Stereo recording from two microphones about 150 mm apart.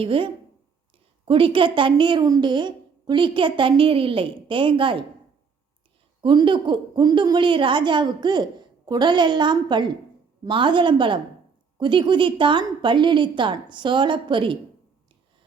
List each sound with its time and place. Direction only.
0.0 s a woman's voice: 35° right (ahead or behind)
6.2 s a woman's voice: 30° right (ahead or behind)